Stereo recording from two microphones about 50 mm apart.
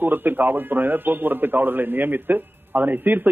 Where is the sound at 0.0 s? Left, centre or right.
Right.